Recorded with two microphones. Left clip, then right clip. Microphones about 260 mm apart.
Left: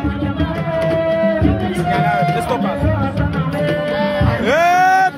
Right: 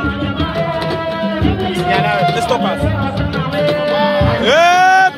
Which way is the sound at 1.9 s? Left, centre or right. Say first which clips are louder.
Right 2 dB; right.